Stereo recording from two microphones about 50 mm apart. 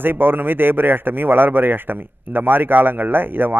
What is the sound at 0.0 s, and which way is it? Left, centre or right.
Speech, right.